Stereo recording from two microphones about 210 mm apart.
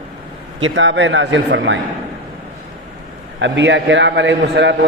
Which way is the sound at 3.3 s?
60° right (ahead or behind).